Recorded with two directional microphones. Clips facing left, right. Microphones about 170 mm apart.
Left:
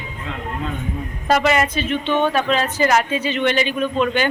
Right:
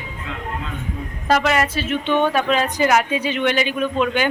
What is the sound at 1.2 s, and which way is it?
A woman's voice, centre (ahead or behind).